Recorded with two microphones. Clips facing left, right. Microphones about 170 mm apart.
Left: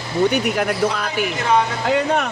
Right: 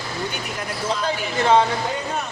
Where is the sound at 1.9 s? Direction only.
75° left (ahead or behind).